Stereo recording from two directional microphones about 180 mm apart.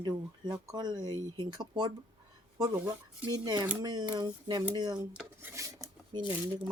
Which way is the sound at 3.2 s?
25° right (ahead or behind).